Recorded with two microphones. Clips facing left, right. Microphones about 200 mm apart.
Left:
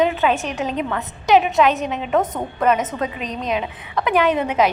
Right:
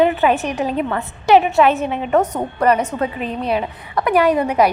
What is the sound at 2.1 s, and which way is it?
A woman's voice, centre (ahead or behind).